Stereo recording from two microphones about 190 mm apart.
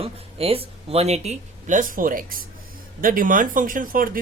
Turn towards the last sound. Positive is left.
turn(degrees=-45)  # may be behind; listen again after turning